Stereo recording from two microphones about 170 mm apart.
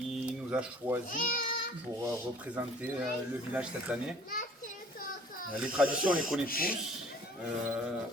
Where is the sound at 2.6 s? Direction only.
10° right (ahead or behind).